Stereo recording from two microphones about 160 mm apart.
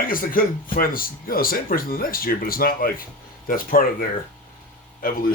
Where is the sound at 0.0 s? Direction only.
60° left (ahead or behind).